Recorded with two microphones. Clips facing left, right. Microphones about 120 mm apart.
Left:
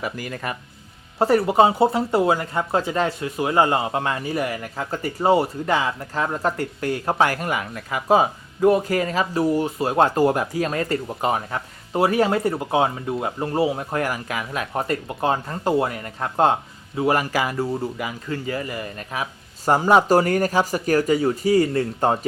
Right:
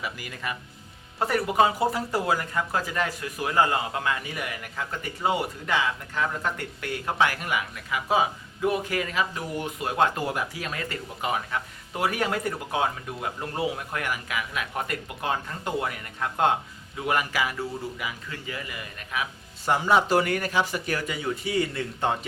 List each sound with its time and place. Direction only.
0.0 s speech: 45° left (ahead or behind)
1.2 s speech: 30° left (ahead or behind)